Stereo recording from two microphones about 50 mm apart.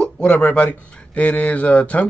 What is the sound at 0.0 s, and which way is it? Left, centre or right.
Speech, left.